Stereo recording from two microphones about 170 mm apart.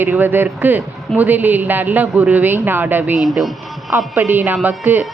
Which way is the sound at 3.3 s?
Centre (ahead or behind).